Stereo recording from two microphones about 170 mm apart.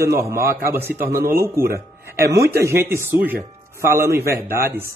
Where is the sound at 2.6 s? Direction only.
15° right (ahead or behind).